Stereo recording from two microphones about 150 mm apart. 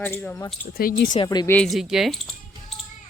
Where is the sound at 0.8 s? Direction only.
75° left (ahead or behind).